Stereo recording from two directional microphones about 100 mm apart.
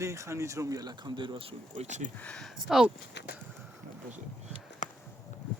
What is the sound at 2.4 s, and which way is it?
Speech, 5° right (ahead or behind).